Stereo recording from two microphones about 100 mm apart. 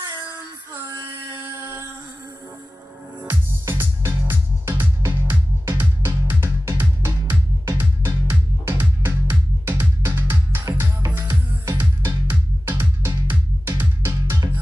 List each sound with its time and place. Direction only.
1.3 s a sound: 25° right (ahead or behind)
3.3 s music: 25° right (ahead or behind)
10.6 s music: 35° right (ahead or behind)
11.1 s music: 25° right (ahead or behind)